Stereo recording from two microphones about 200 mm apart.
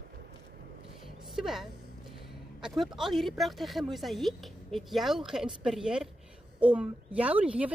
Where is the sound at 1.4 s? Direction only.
Centre (ahead or behind).